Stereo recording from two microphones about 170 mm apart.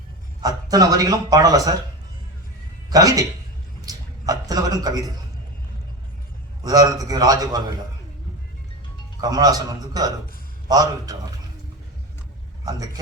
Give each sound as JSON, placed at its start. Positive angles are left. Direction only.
{"t": 0.4, "sound": "speech", "side_deg": -20}
{"t": 2.9, "sound": "a man's voice", "side_deg": -20}
{"t": 6.6, "sound": "speech", "side_deg": -20}
{"t": 9.2, "sound": "speech", "side_deg": -20}